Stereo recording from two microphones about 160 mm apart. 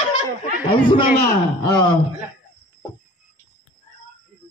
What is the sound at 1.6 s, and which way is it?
Speech, 25° left (ahead or behind).